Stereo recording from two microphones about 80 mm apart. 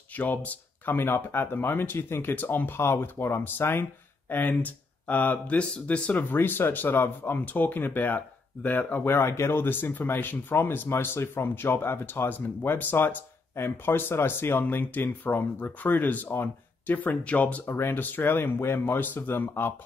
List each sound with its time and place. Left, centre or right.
0.1 s speech: centre
6.3 s speech: left